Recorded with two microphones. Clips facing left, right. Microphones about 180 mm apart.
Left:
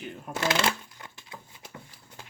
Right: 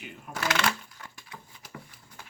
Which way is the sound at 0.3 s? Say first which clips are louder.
Left 2 dB; 30° left (ahead or behind).